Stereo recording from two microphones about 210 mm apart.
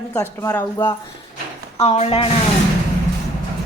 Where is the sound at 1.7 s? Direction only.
30° left (ahead or behind).